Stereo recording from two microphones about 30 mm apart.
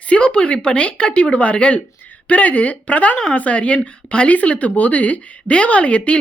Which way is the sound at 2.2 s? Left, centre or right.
Left.